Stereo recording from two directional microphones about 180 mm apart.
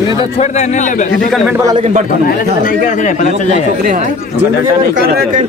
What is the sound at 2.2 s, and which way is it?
Speech, 50° left (ahead or behind).